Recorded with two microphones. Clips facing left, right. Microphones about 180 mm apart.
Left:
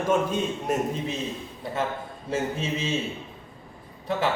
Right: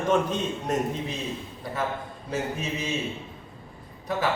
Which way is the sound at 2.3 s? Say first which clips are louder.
Left 2 dB; 25° left (ahead or behind).